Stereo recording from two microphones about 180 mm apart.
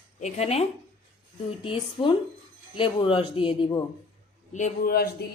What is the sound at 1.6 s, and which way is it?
Speech, 30° left (ahead or behind).